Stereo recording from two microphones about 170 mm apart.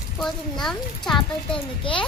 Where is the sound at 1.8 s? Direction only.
30° left (ahead or behind).